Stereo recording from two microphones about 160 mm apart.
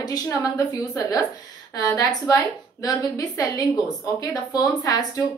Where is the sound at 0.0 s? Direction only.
25° left (ahead or behind).